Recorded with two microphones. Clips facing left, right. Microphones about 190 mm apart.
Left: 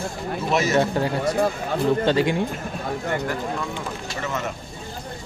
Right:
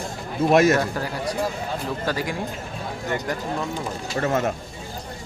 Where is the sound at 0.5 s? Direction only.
55° right (ahead or behind).